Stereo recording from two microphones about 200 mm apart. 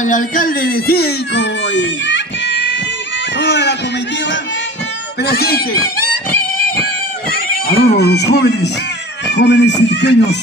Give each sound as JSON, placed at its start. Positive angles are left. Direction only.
{"t": 0.0, "sound": "speech", "side_deg": 40}
{"t": 3.3, "sound": "a sound", "side_deg": 60}
{"t": 5.2, "sound": "speech", "side_deg": 50}
{"t": 7.6, "sound": "cat", "side_deg": 50}
{"t": 8.0, "sound": "speech", "side_deg": 55}